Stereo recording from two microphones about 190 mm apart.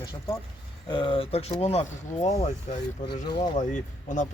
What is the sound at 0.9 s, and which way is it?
Speech, 25° left (ahead or behind).